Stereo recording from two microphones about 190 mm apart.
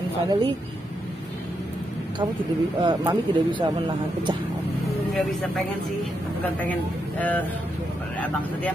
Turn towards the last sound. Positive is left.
turn(degrees=10)  # may be behind; listen again after turning